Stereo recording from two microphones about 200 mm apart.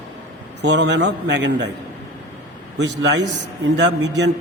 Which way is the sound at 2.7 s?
60° right (ahead or behind).